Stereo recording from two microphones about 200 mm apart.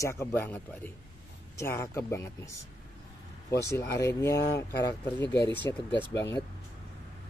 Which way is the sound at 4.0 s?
15° left (ahead or behind).